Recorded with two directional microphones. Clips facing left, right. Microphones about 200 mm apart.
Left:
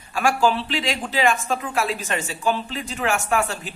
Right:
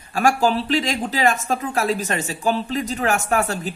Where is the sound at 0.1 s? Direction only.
40° right (ahead or behind).